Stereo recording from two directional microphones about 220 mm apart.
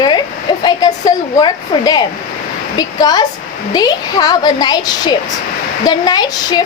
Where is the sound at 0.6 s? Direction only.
15° left (ahead or behind).